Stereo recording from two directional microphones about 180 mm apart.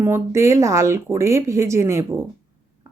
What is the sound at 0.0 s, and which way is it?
Speech, 15° right (ahead or behind).